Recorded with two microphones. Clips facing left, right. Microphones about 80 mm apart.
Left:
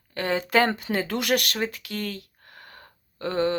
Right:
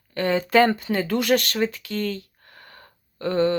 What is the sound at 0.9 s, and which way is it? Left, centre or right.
Speech, centre.